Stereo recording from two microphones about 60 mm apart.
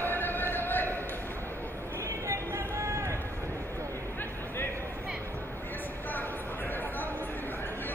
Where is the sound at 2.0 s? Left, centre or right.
Right.